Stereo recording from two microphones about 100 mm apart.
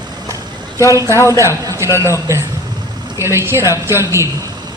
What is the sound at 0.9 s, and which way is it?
A man's voice, 30° right (ahead or behind).